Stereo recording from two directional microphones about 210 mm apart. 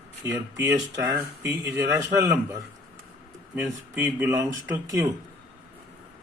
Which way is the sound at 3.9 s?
10° right (ahead or behind).